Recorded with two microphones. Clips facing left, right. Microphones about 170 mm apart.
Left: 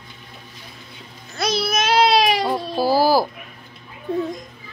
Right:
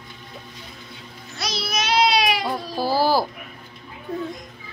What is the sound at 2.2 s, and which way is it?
Cat, 35° left (ahead or behind).